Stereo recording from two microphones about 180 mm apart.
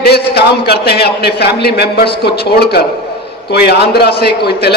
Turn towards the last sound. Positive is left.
turn(degrees=65)  # may be behind; listen again after turning